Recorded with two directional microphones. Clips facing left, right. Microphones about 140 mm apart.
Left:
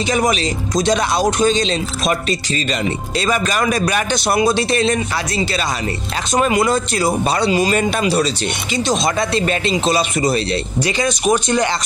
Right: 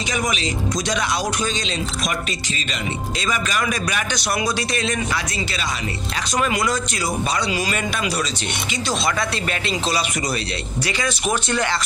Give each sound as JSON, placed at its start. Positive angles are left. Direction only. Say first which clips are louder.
{"t": 0.1, "sound": "speech", "louder": "left 6 dB", "side_deg": 35}
{"t": 3.2, "sound": "speech", "louder": "left 6 dB", "side_deg": 35}
{"t": 6.3, "sound": "speech", "louder": "left 6 dB", "side_deg": 25}